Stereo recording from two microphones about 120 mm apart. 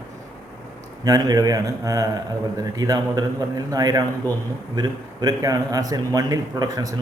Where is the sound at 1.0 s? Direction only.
30° right (ahead or behind).